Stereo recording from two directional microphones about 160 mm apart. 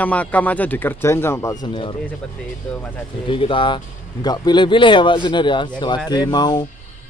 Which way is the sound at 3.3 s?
35° left (ahead or behind).